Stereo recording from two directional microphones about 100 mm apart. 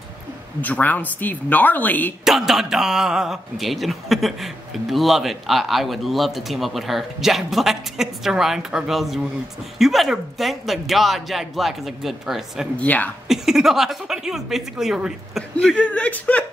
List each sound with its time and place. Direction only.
0.6 s speech: 15° left (ahead or behind)
2.2 s a man's voice: 5° right (ahead or behind)
12.7 s speech: 15° left (ahead or behind)
13.3 s a man's voice: 5° right (ahead or behind)
15.5 s speech: 10° left (ahead or behind)